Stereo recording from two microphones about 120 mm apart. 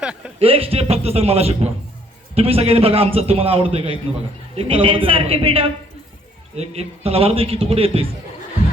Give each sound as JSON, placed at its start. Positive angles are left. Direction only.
{"t": 0.3, "sound": "a man's voice", "side_deg": -50}